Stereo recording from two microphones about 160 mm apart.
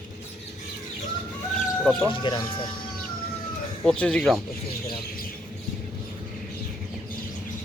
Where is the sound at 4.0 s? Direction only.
5° left (ahead or behind).